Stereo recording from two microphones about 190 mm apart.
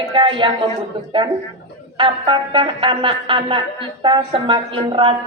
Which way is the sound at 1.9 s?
30° right (ahead or behind).